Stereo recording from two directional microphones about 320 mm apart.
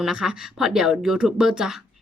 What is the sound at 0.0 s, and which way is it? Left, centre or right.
Speech, centre.